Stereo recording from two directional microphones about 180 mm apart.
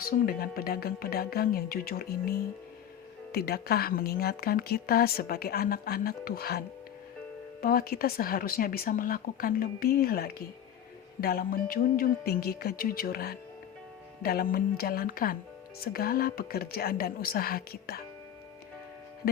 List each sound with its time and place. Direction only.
0.0 s speech: 55° left (ahead or behind)
7.6 s speech: 55° left (ahead or behind)
19.2 s speech: 55° left (ahead or behind)